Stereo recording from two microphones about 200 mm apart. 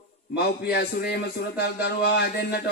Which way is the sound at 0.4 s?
55° left (ahead or behind).